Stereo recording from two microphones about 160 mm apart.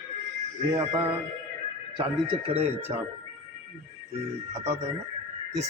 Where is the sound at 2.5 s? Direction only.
40° right (ahead or behind).